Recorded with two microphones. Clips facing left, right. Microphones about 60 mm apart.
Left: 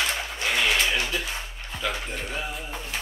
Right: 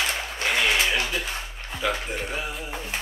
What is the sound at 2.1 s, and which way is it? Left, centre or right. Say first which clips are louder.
Speech: right 3 dB; centre.